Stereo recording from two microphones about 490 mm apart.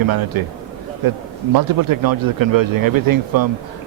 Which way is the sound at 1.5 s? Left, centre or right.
Right.